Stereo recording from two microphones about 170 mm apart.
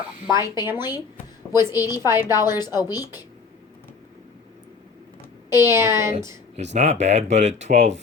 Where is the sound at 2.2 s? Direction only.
20° left (ahead or behind).